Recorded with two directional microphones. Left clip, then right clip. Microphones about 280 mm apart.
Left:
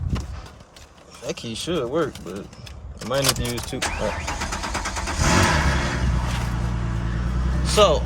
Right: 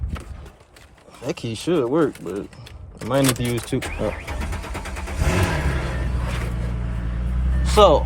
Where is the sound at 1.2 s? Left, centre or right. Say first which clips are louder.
Right 3 dB; right.